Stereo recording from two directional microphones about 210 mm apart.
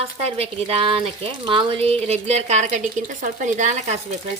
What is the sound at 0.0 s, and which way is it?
Speech, 30° right (ahead or behind).